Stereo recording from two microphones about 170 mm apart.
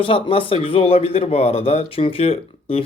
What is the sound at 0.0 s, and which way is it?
Speech, 35° left (ahead or behind).